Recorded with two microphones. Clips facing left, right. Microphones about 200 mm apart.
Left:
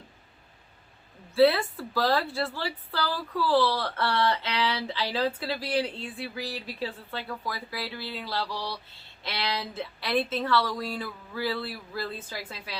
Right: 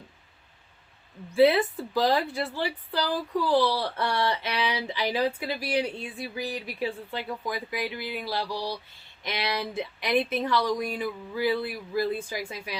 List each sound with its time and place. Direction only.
1.3 s a woman's voice: 15° right (ahead or behind)